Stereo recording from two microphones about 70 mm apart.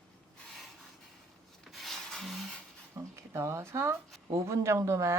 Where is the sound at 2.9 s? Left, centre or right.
Right.